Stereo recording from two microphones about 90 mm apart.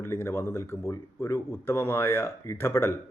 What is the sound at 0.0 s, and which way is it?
A man's voice, 30° left (ahead or behind).